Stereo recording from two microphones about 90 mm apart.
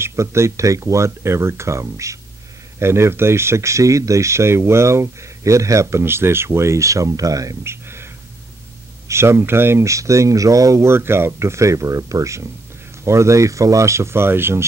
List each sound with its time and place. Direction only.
0.0 s speech: 30° right (ahead or behind)